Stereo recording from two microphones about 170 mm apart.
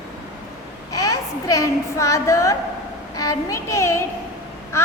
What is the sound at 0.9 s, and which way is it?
A woman's voice, 20° left (ahead or behind).